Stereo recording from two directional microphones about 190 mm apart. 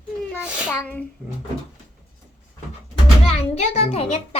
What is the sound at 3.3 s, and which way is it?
A child's voice, 35° left (ahead or behind).